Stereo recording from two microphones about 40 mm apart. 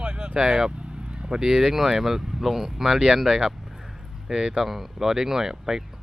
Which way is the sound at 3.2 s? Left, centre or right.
Centre.